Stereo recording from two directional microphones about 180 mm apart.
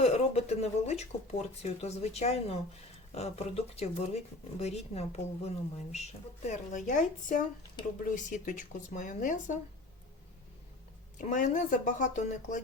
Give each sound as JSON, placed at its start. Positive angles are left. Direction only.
{"t": 0.0, "sound": "speech", "side_deg": 35}
{"t": 6.5, "sound": "speech", "side_deg": 45}
{"t": 11.2, "sound": "speech", "side_deg": 45}